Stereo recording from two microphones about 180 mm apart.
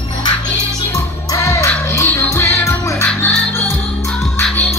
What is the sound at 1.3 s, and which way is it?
Music, 15° left (ahead or behind).